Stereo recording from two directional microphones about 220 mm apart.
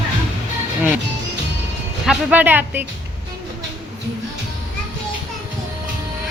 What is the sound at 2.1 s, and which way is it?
Speech, 5° right (ahead or behind).